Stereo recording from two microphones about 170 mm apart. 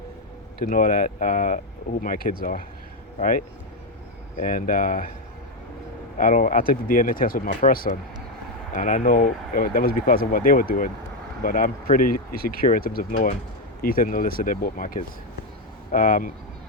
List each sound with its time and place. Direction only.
0.6 s speech: 55° left (ahead or behind)
6.1 s speech: 50° left (ahead or behind)